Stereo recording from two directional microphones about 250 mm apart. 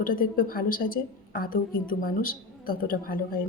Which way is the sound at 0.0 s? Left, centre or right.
Left.